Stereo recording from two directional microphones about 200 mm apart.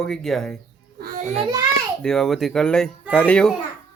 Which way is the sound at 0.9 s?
45° right (ahead or behind).